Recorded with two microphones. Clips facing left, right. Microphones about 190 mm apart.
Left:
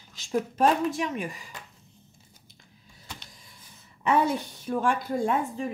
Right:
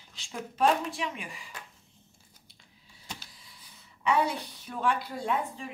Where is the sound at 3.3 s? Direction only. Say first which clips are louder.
Left 3 dB; 45° left (ahead or behind).